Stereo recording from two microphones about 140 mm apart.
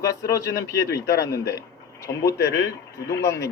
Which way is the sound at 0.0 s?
25° left (ahead or behind).